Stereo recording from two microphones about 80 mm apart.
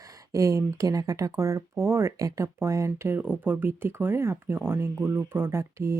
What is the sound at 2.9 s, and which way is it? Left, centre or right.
Speech, right.